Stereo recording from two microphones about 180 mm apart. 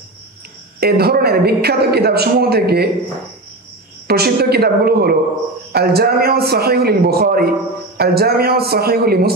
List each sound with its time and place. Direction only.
0.7 s a man's voice: 60° right (ahead or behind)
4.1 s a man's voice: 60° right (ahead or behind)